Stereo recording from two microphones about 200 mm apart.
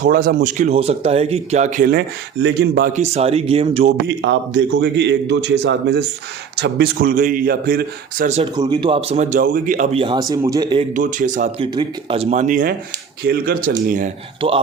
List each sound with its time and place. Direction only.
0.0 s a man's voice: 45° right (ahead or behind)
2.9 s speech: 35° right (ahead or behind)
4.2 s a man's voice: 65° right (ahead or behind); by 8.3 s 45° right (ahead or behind)
8.5 s speech: 20° right (ahead or behind)
10.9 s speech: 40° right (ahead or behind)
11.6 s a man's voice: 25° right (ahead or behind); by 14.1 s 45° right (ahead or behind)
14.4 s speech: 25° right (ahead or behind)